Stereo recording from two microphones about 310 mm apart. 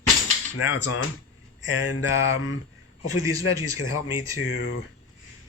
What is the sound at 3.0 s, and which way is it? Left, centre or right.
A man's voice, left.